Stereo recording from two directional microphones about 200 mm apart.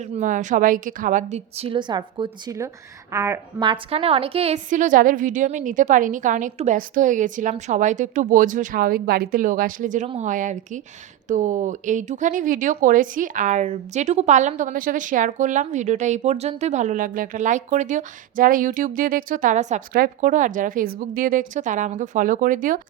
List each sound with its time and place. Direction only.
0.0 s a woman's voice: 35° right (ahead or behind); by 3.7 s 15° right (ahead or behind)
3.7 s speech: 30° right (ahead or behind)